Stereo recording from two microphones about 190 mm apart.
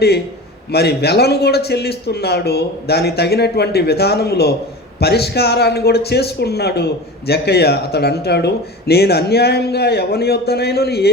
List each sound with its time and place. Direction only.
0.7 s speech: 60° left (ahead or behind)